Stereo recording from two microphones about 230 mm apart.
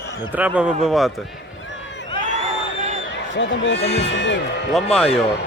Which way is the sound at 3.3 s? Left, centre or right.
Left.